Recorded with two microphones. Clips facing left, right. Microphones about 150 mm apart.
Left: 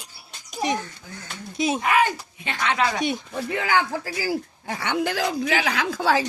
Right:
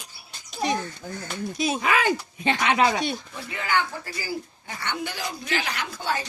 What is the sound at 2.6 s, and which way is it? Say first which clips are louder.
Speech: right 1 dB; 15° right (ahead or behind).